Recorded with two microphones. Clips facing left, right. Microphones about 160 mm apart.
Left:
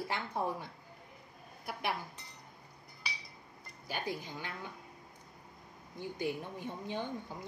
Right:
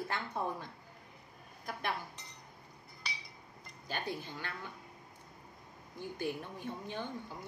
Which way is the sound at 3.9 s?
10° left (ahead or behind).